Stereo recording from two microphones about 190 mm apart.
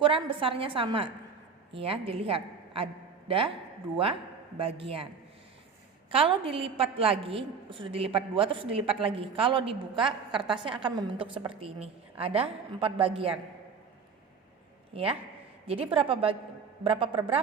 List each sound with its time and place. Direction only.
0.0 s a woman's voice: 25° right (ahead or behind)
4.5 s a woman's voice: 30° right (ahead or behind)
6.1 s a woman's voice: 30° right (ahead or behind)
14.9 s a woman's voice: 30° right (ahead or behind)